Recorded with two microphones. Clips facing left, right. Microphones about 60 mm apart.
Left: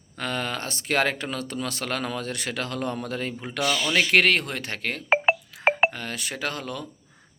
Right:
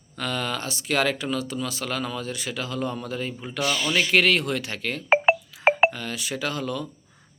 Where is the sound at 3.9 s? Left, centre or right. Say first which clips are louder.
Even; left.